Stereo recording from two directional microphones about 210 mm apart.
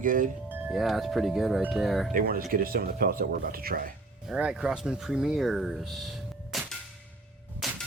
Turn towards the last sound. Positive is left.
turn(degrees=0)  # may be behind; listen again after turning